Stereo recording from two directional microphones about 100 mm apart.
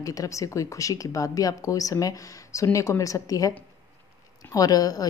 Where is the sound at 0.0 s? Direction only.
35° left (ahead or behind).